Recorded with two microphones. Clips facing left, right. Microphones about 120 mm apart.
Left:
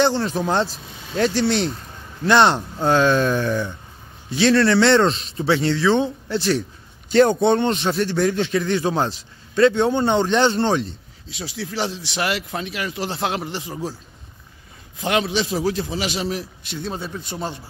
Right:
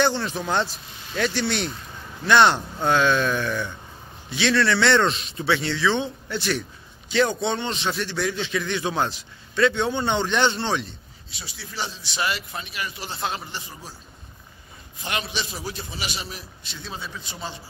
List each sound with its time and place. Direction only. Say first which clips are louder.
0.0 s a man's voice: left 4 dB; 35° left (ahead or behind)
7.1 s a man's voice: left 7 dB; 50° left (ahead or behind)
11.2 s speech: left 11 dB; 90° left
15.0 s a man's voice: left 9 dB; 90° left; by 17.6 s 55° left (ahead or behind)